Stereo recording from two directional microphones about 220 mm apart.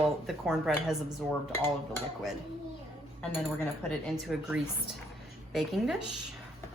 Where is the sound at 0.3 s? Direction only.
Centre (ahead or behind).